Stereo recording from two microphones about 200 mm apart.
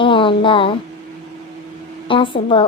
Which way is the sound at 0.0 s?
25° left (ahead or behind).